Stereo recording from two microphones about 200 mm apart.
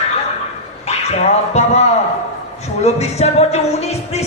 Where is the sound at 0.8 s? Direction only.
30° left (ahead or behind).